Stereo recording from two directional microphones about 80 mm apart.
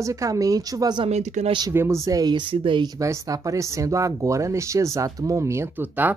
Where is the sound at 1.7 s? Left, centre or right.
Right.